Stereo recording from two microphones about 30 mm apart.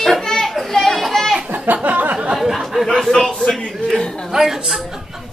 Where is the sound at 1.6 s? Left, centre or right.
Right.